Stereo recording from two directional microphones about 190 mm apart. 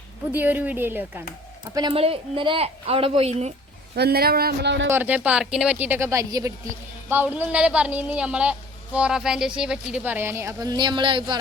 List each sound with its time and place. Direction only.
0.3 s a woman's voice: 10° right (ahead or behind)
1.7 s speech: 25° right (ahead or behind)
3.9 s speech: 55° right (ahead or behind)
4.9 s a woman's voice: 10° right (ahead or behind)